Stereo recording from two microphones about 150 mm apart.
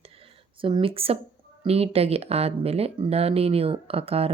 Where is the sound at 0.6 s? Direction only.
35° right (ahead or behind).